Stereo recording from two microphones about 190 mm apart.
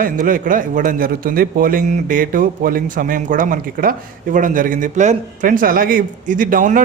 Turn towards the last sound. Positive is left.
turn(degrees=-45)  # may be behind; listen again after turning